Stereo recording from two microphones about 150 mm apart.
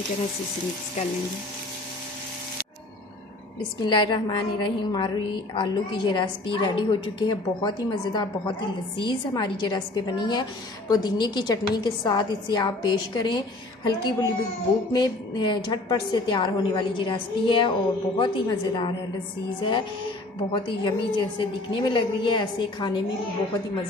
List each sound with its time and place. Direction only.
3.8 s a woman's voice: 30° left (ahead or behind)
20.3 s a woman's voice: 30° left (ahead or behind)